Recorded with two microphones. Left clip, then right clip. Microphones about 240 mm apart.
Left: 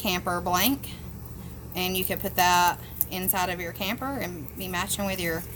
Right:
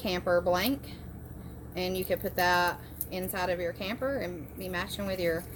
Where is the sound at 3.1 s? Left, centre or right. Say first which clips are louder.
Left 3 dB; left.